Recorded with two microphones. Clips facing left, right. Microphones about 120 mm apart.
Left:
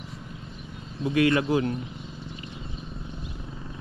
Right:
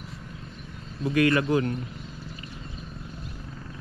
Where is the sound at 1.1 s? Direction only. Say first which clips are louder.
Even; 25° left (ahead or behind).